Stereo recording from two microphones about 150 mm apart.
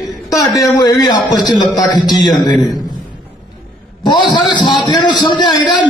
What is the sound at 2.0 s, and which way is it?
Speech, centre (ahead or behind).